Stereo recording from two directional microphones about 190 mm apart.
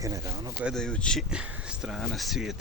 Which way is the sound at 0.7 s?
Centre (ahead or behind).